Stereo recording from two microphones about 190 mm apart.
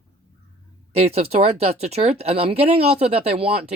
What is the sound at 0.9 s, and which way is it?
Speech, 30° right (ahead or behind).